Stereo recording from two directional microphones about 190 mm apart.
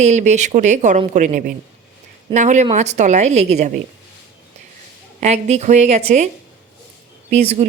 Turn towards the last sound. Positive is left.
turn(degrees=-30)  # may be behind; listen again after turning